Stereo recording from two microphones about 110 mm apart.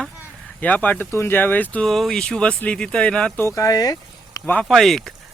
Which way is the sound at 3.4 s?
25° left (ahead or behind).